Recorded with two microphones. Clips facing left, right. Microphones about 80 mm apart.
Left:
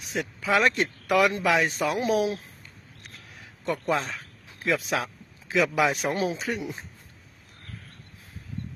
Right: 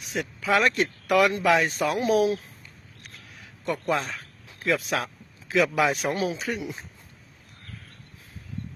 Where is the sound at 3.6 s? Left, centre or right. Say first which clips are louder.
Even; left.